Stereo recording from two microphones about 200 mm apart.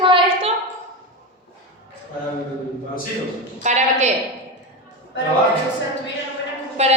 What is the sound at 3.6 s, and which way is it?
Speech, 35° right (ahead or behind).